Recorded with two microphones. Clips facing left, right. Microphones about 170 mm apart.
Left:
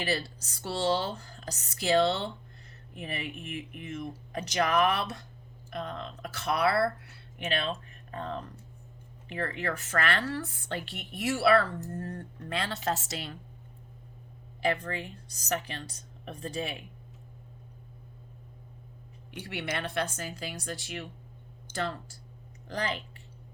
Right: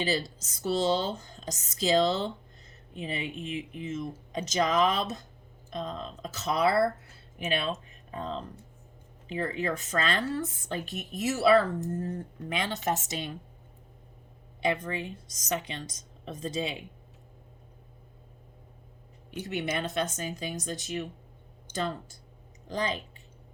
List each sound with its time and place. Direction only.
0.0 s speech: 20° right (ahead or behind)
7.5 s speech: 10° right (ahead or behind)
14.7 s speech: 20° right (ahead or behind)
15.1 s speech: 65° left (ahead or behind)
15.5 s speech: 15° right (ahead or behind)
19.5 s speech: 20° right (ahead or behind)